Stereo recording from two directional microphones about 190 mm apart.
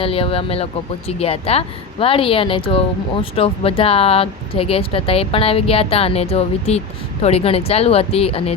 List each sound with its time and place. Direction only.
0.0 s speech: 30° left (ahead or behind)